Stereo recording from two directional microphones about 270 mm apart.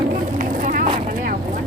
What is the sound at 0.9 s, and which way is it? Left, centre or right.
Vehicle, right.